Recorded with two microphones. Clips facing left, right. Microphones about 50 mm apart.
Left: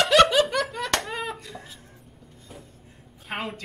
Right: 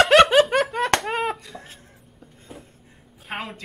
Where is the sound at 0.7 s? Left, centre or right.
Right.